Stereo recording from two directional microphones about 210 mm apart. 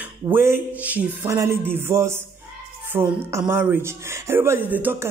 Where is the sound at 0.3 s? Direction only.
10° right (ahead or behind).